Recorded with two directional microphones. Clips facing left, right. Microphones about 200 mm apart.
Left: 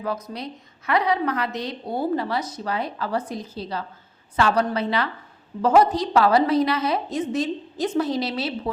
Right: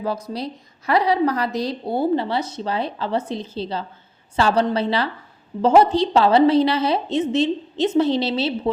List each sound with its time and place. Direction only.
0.3 s a woman's voice: 35° right (ahead or behind)